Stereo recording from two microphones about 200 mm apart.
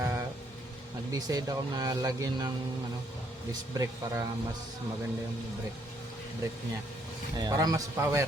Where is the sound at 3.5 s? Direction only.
15° right (ahead or behind).